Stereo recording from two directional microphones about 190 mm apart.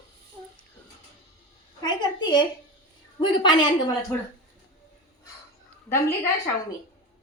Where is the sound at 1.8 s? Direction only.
25° left (ahead or behind).